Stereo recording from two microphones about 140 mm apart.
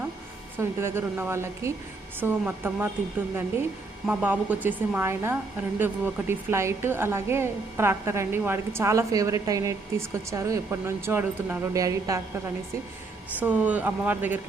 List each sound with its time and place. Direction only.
0.5 s speech: 15° right (ahead or behind)
4.0 s a woman's voice: 10° right (ahead or behind)
11.7 s a woman's voice: 25° right (ahead or behind)
13.4 s speech: 10° right (ahead or behind)